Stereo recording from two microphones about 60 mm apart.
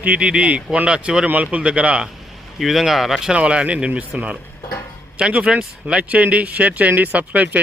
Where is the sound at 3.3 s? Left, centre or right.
Centre.